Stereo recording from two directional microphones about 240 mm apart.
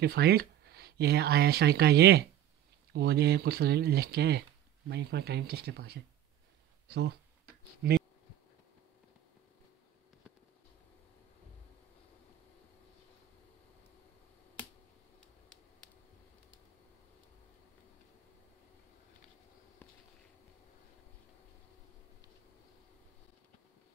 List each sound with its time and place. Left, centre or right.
0.0 s speech: right